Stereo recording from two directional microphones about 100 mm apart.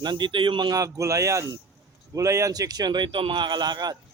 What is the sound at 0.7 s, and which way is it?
Speech, 35° right (ahead or behind).